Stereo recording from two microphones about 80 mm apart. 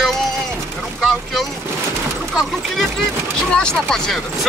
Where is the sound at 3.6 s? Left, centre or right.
Centre.